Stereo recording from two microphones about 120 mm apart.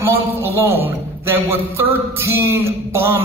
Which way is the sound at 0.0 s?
20° right (ahead or behind).